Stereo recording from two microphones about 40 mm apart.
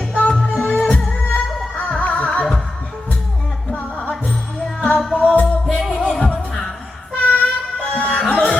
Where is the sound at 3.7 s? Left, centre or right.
Left.